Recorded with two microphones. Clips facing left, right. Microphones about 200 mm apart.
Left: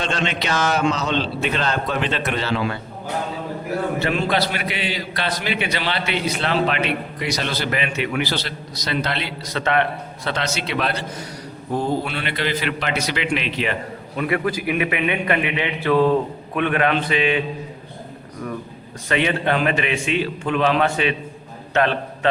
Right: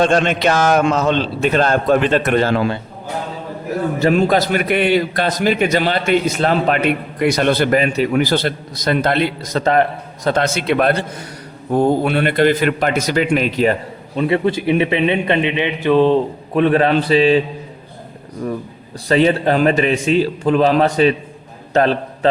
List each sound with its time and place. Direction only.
0.0 s a man's voice: 50° right (ahead or behind)
4.0 s a man's voice: 45° right (ahead or behind)
10.2 s a man's voice: 50° right (ahead or behind)
14.2 s a man's voice: 25° right (ahead or behind)
19.0 s a man's voice: 35° right (ahead or behind)
21.7 s a sound: 40° right (ahead or behind)